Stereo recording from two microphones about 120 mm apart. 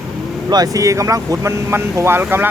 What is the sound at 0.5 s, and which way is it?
Speech, 30° right (ahead or behind).